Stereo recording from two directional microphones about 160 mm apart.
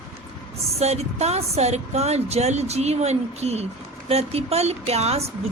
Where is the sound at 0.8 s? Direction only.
40° right (ahead or behind).